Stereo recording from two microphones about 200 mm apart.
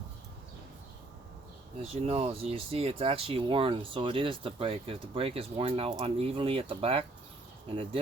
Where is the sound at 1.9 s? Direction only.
30° right (ahead or behind).